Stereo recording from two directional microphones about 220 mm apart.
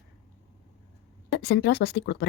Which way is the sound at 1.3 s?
50° left (ahead or behind).